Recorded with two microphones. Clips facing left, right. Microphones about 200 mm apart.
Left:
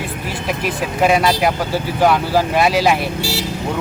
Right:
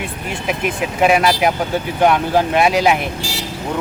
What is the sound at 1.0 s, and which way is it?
Speech, centre (ahead or behind).